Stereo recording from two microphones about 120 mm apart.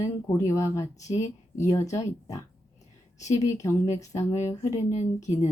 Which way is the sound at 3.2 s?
75° left (ahead or behind).